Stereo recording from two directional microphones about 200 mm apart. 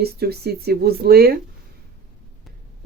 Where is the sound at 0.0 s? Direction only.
55° right (ahead or behind).